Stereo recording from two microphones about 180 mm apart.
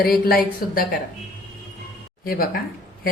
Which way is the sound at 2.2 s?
55° left (ahead or behind).